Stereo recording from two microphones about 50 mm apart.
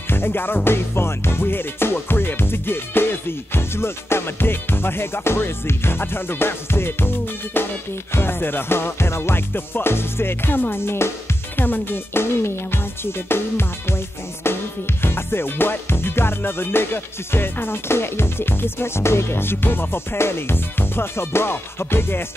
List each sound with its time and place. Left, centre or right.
0.1 s music: left
0.7 s music: left